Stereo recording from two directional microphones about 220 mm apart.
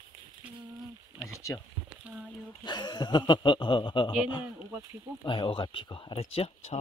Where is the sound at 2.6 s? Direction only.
20° left (ahead or behind).